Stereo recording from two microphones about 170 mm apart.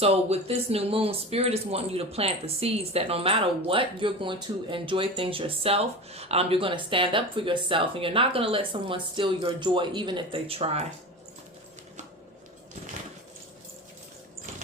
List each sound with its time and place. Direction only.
0.0 s speech: 35° right (ahead or behind)